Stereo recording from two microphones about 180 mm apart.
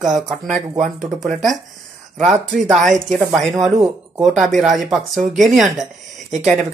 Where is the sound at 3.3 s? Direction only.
Centre (ahead or behind).